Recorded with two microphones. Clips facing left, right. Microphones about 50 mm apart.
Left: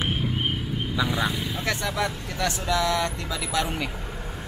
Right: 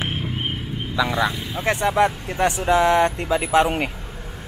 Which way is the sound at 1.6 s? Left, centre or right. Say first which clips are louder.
Right 10 dB; right.